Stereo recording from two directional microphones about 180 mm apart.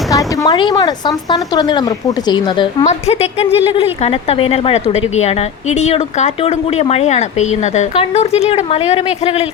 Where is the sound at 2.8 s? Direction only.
35° left (ahead or behind).